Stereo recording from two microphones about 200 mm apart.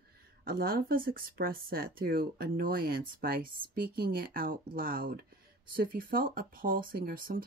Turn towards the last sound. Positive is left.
turn(degrees=-45)  # may be behind; listen again after turning